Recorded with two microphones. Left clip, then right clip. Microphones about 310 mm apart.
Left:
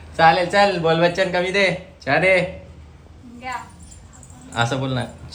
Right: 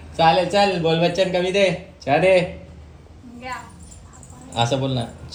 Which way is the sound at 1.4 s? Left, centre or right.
Left.